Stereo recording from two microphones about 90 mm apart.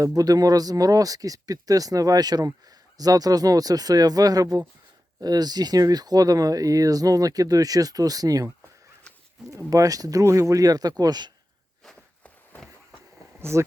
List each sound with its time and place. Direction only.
0.0 s speech: 45° right (ahead or behind)
9.5 s speech: 35° right (ahead or behind)
11.9 s a sound: 5° left (ahead or behind)
13.4 s speech: 30° right (ahead or behind)